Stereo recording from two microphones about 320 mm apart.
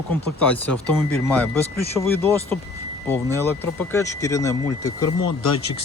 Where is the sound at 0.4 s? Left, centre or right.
Centre.